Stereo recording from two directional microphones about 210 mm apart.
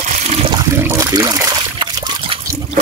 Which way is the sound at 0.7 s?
15° right (ahead or behind).